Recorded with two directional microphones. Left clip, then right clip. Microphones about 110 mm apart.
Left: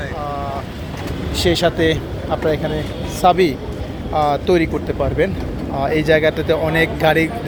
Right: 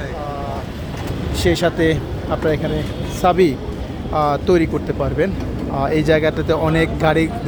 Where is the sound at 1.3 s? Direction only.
20° right (ahead or behind).